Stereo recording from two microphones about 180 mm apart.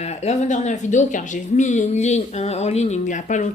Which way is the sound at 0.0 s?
35° left (ahead or behind).